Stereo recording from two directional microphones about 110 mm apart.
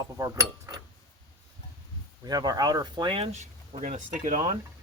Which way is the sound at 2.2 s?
35° right (ahead or behind).